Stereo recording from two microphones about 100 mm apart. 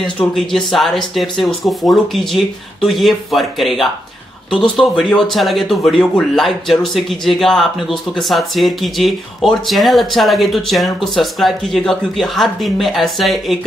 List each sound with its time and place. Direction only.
0.2 s speech: 5° left (ahead or behind)